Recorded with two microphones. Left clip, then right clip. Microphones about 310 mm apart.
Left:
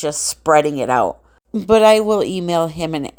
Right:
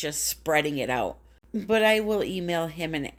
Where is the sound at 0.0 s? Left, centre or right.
Centre.